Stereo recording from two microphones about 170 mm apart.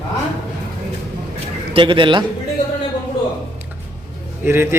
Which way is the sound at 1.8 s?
30° right (ahead or behind).